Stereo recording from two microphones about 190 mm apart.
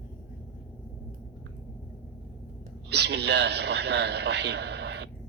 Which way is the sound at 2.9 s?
60° right (ahead or behind).